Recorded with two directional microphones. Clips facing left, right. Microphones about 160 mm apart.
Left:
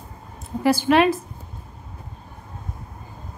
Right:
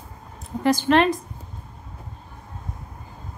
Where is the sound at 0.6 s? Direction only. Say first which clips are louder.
Left 1 dB; 5° left (ahead or behind).